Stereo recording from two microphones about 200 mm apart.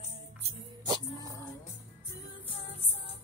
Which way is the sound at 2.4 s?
30° left (ahead or behind).